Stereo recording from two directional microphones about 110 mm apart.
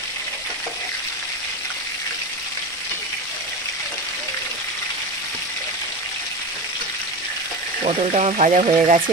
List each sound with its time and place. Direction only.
7.8 s speech: 75° right (ahead or behind)